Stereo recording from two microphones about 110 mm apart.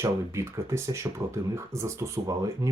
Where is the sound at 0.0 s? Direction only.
25° right (ahead or behind).